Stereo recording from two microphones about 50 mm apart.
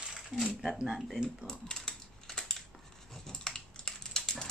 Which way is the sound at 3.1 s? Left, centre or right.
Centre.